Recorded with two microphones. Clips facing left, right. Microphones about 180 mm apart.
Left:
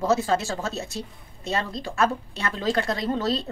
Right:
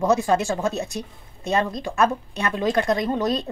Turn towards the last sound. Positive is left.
turn(degrees=-15)  # may be behind; listen again after turning